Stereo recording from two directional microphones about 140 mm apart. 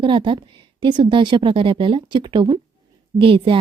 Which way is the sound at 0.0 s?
35° right (ahead or behind).